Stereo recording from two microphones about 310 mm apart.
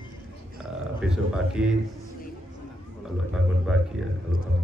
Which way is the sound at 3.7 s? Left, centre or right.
Centre.